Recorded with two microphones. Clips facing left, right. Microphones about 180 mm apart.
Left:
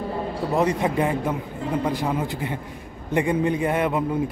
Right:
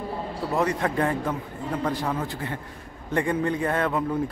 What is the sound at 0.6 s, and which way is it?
A man's voice, 20° left (ahead or behind).